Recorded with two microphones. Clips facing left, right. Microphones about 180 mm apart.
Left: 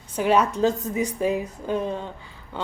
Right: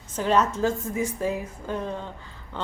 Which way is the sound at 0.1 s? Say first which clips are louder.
Left 2 dB; 10° left (ahead or behind).